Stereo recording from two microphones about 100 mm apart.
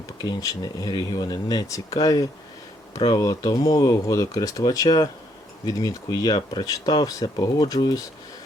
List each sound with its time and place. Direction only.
0.2 s speech: 40° left (ahead or behind)